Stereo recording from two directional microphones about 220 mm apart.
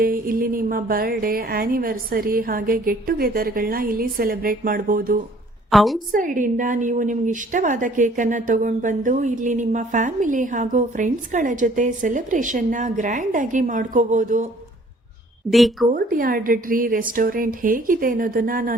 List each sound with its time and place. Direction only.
0.0 s a woman's voice: 40° right (ahead or behind)
5.7 s a woman's voice: centre (ahead or behind)
6.1 s a woman's voice: 35° right (ahead or behind)
15.4 s a woman's voice: centre (ahead or behind)
15.9 s a woman's voice: 40° right (ahead or behind)